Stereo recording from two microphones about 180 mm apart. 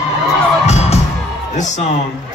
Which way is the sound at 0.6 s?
35° left (ahead or behind).